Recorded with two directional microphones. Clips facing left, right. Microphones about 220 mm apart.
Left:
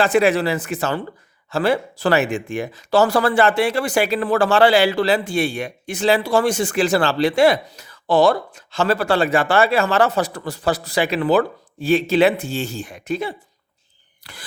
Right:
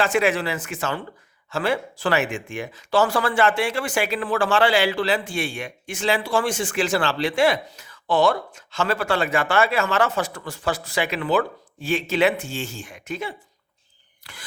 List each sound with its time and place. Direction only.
0.0 s speech: 35° left (ahead or behind)